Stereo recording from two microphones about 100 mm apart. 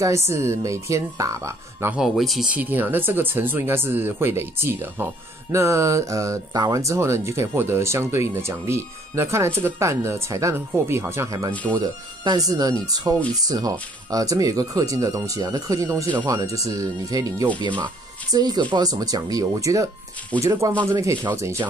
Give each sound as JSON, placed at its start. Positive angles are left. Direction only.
{"t": 0.0, "sound": "speech", "side_deg": -30}
{"t": 2.0, "sound": "speech", "side_deg": 0}
{"t": 2.5, "sound": "speech", "side_deg": -15}
{"t": 11.7, "sound": "speech", "side_deg": -45}
{"t": 17.6, "sound": "speech", "side_deg": -50}